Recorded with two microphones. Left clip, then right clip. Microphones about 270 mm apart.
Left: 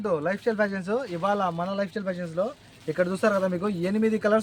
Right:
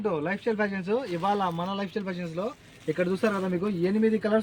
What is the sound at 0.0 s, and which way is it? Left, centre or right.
Speech, left.